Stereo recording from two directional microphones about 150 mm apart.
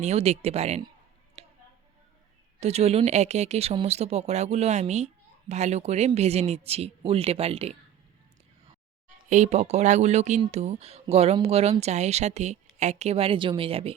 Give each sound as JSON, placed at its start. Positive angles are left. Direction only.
{"t": 0.0, "sound": "speech", "side_deg": -45}
{"t": 1.4, "sound": "a sound", "side_deg": -45}
{"t": 2.6, "sound": "speech", "side_deg": -45}
{"t": 9.0, "sound": "speech", "side_deg": -55}